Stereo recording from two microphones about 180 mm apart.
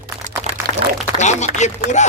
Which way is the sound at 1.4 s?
40° left (ahead or behind).